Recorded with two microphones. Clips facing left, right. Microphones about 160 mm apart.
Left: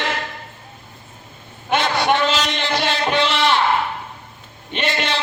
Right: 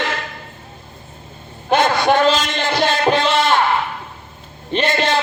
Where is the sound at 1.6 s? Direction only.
45° right (ahead or behind).